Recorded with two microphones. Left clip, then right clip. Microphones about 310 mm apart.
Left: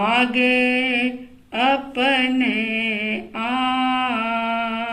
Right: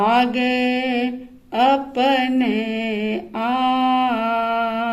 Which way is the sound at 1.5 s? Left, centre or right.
Right.